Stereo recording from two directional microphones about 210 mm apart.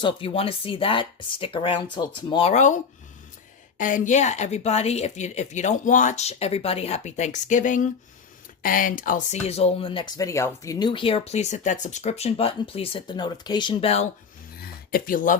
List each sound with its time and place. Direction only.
0.0 s speech: 25° left (ahead or behind)
3.8 s a woman's voice: 40° left (ahead or behind)
14.6 s a sound: 45° left (ahead or behind)